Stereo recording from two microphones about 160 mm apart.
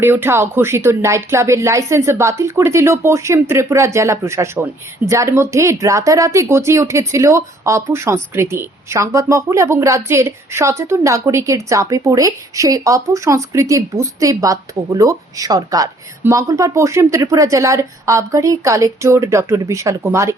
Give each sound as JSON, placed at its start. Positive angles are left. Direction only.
{"t": 0.0, "sound": "speech", "side_deg": -15}